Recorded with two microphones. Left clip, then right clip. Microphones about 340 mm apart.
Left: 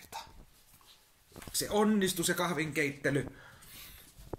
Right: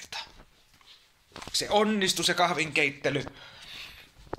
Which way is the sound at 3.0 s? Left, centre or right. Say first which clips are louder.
Right 3 dB; right.